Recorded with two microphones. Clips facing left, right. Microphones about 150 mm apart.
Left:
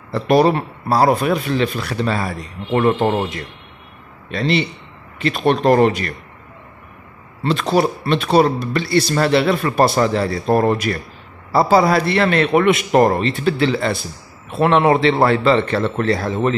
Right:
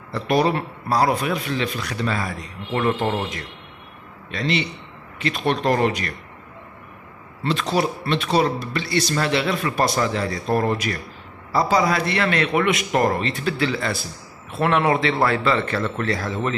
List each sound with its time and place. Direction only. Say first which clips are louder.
0.3 s a man's voice: left 6 dB; 35° left (ahead or behind)
1.9 s a man's voice: left 4 dB; 30° left (ahead or behind)
5.3 s speech: left 6 dB; 50° left (ahead or behind)
7.5 s speech: left 5 dB; 55° left (ahead or behind)
8.8 s a man's voice: left 5 dB; 30° left (ahead or behind)